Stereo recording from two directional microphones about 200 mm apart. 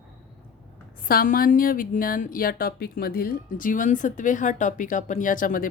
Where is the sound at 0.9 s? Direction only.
45° left (ahead or behind).